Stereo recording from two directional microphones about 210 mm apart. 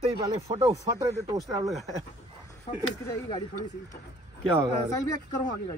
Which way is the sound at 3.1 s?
20° left (ahead or behind).